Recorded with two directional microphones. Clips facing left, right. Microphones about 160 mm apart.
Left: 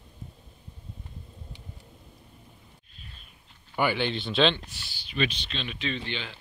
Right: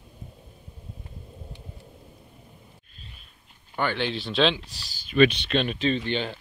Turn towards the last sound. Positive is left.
turn(degrees=-45)  # may be behind; listen again after turning